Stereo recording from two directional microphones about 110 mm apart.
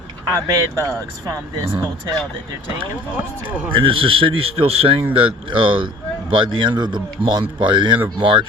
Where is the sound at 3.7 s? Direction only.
55° right (ahead or behind).